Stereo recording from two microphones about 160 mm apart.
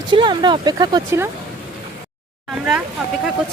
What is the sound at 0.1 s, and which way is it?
Speech, 30° right (ahead or behind).